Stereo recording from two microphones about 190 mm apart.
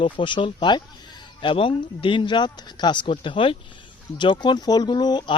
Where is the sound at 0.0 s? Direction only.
25° left (ahead or behind).